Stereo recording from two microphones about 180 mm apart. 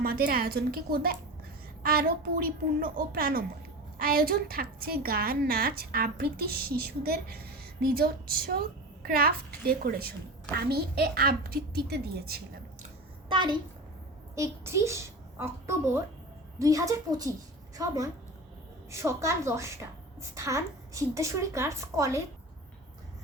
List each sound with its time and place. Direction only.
0.0 s a woman's voice: 55° right (ahead or behind)
13.2 s a sound: 25° right (ahead or behind)
14.3 s a child's voice: 15° right (ahead or behind)